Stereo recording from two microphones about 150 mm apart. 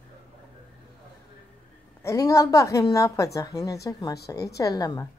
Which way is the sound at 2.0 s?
20° left (ahead or behind).